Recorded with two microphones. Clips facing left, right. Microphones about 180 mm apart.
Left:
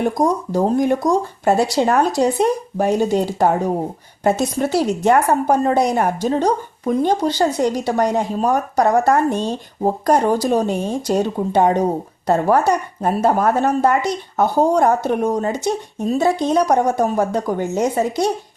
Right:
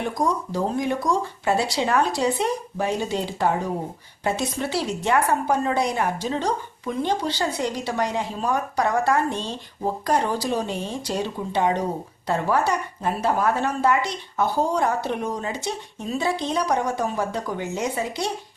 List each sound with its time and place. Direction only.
0.0 s a woman's voice: 45° left (ahead or behind)